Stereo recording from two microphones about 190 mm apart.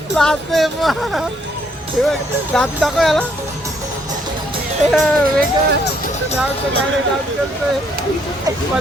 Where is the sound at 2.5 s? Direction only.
Centre (ahead or behind).